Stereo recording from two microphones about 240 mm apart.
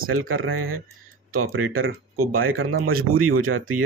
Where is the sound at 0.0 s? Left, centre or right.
Right.